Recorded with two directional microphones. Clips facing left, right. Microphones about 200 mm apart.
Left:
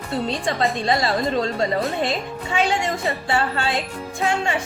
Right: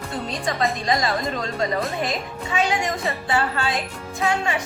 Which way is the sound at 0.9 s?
30° left (ahead or behind).